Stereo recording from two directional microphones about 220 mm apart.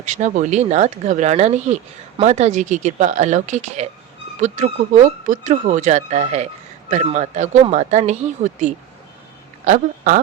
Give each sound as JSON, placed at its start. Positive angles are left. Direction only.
{"t": 0.0, "sound": "speech", "side_deg": -35}
{"t": 9.6, "sound": "speech", "side_deg": -35}